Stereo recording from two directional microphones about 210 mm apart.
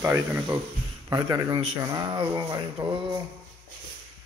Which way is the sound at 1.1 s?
20° right (ahead or behind).